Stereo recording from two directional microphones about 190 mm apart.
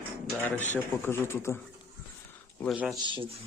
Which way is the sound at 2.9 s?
25° right (ahead or behind).